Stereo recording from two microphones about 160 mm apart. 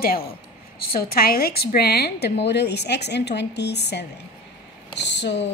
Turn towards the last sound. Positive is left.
turn(degrees=90)